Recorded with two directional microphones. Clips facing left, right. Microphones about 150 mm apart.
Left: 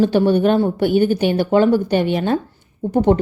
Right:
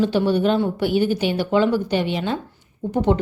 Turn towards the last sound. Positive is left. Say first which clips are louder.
# left 4 dB
turn(degrees=45)  # may be behind; listen again after turning